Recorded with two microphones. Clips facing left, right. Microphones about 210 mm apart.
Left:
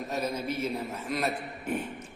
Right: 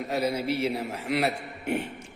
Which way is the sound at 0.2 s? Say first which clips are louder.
Right 5 dB; 10° right (ahead or behind).